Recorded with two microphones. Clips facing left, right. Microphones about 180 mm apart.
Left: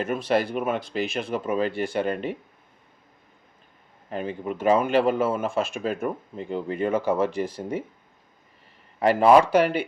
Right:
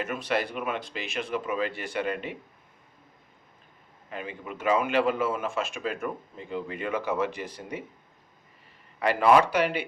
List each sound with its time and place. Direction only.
0.1 s speech: 30° left (ahead or behind)
4.1 s speech: 35° left (ahead or behind)
9.0 s speech: 35° left (ahead or behind)